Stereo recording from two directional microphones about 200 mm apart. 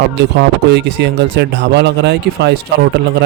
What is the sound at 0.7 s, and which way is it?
A man's voice, 60° right (ahead or behind).